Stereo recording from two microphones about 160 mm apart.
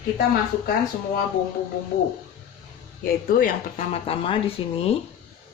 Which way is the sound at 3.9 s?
35° left (ahead or behind).